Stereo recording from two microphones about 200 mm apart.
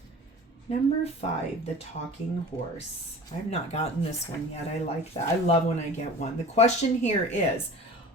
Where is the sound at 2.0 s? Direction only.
45° left (ahead or behind).